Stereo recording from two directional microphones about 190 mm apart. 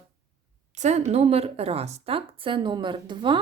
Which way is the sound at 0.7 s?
40° right (ahead or behind).